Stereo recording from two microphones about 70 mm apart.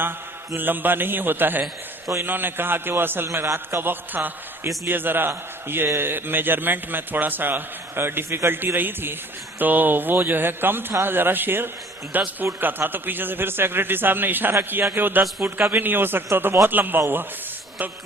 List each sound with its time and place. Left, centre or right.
0.5 s a man's voice: right